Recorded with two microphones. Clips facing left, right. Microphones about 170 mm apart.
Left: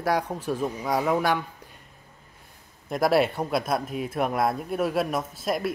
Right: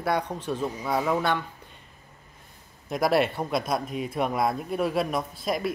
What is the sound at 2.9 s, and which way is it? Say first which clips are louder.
Speech: left 1 dB; centre (ahead or behind).